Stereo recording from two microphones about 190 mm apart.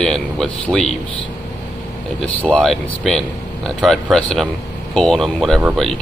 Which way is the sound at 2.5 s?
5° left (ahead or behind).